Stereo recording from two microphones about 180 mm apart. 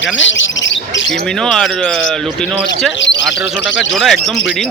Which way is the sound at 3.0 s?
90° left.